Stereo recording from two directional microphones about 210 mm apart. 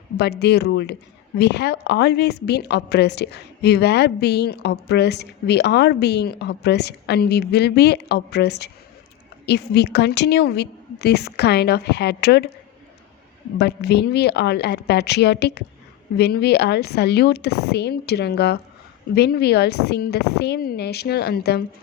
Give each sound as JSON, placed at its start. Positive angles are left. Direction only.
{"t": 0.2, "sound": "a woman's voice", "side_deg": 50}
{"t": 13.6, "sound": "a woman's voice", "side_deg": 50}